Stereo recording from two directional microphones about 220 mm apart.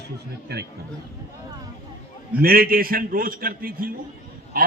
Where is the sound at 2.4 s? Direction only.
40° right (ahead or behind).